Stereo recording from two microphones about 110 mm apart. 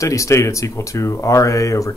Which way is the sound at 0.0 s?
30° left (ahead or behind).